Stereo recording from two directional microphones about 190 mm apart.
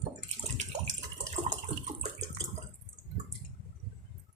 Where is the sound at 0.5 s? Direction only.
40° right (ahead or behind).